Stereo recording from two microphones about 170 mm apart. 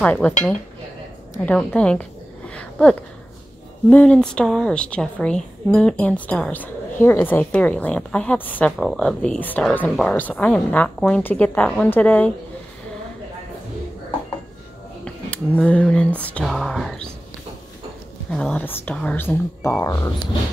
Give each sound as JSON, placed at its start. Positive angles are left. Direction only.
{"t": 0.0, "sound": "a woman's voice", "side_deg": 10}
{"t": 1.3, "sound": "a woman's voice", "side_deg": 10}
{"t": 15.0, "sound": "speech", "side_deg": 5}
{"t": 18.3, "sound": "a woman's voice", "side_deg": 5}